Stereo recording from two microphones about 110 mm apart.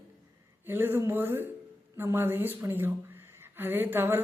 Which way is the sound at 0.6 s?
20° right (ahead or behind).